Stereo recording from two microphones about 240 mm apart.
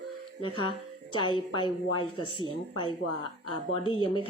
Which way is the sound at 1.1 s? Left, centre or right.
Left.